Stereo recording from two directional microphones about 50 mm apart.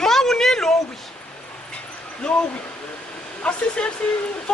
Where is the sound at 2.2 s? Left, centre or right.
Centre.